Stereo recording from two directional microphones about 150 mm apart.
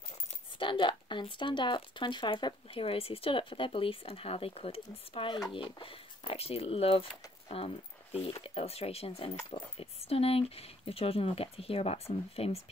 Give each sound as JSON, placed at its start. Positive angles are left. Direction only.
{"t": 0.6, "sound": "speech", "side_deg": 35}